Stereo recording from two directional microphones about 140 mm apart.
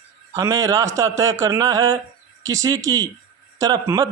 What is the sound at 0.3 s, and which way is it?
Speech, 25° right (ahead or behind).